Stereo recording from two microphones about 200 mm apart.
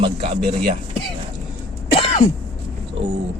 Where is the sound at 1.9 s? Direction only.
30° left (ahead or behind).